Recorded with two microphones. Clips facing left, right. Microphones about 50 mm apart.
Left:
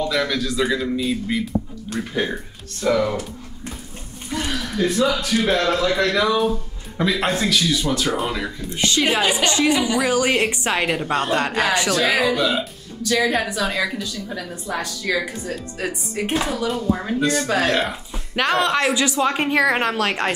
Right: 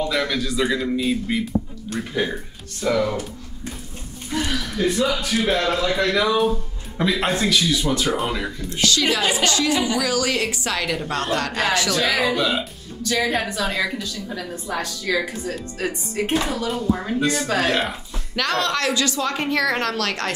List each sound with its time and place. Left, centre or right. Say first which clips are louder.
0.1 s a woman's voice: left 1 dB; centre
4.5 s a woman's voice: left 2 dB; centre
9.4 s speech: left 2 dB; left
10.9 s a woman's voice: left 3 dB; centre
11.9 s a woman's voice: left 2 dB; centre
18.3 s speech: left 3 dB; centre